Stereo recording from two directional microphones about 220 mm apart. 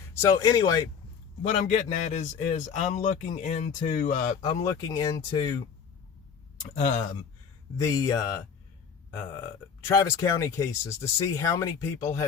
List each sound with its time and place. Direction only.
0.1 s speech: 15° left (ahead or behind)
1.5 s a man's voice: 35° left (ahead or behind)
4.6 s speech: 15° left (ahead or behind)
6.6 s a man's voice: 35° left (ahead or behind)
7.8 s speech: 15° left (ahead or behind)
9.8 s speech: 15° left (ahead or behind)